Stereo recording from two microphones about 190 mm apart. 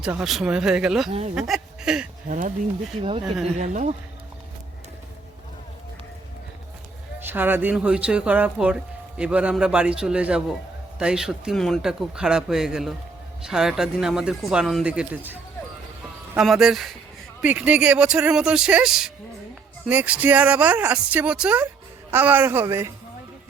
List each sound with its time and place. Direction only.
0.0 s speech: 5° right (ahead or behind)
3.0 s speech: 30° right (ahead or behind)
7.2 s speech: 10° right (ahead or behind)